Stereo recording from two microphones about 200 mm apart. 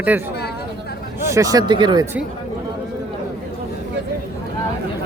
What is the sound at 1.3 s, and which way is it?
Speech, 15° right (ahead or behind).